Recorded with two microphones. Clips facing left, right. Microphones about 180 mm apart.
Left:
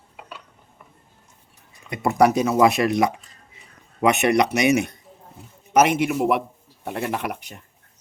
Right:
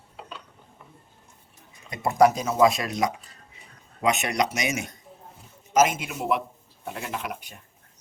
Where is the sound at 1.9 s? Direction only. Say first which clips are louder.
Left 2 dB; 65° left (ahead or behind).